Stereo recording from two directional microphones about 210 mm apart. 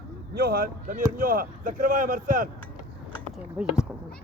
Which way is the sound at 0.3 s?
45° right (ahead or behind).